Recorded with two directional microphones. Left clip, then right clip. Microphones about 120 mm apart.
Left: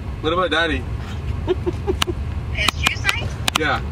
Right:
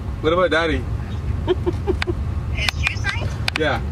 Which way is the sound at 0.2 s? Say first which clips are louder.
Right 1 dB; centre (ahead or behind).